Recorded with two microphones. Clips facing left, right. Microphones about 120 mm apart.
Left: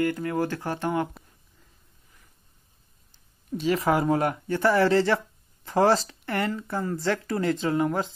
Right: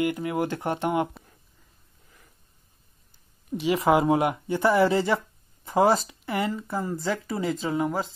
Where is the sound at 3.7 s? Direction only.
20° right (ahead or behind).